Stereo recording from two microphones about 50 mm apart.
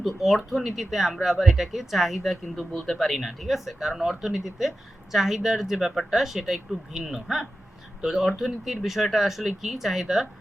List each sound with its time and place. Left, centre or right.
0.0 s speech: centre